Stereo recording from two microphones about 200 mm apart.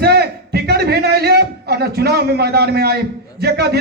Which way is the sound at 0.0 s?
55° right (ahead or behind).